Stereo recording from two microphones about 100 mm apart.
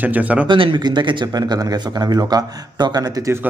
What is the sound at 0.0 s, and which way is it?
Speech, 15° right (ahead or behind).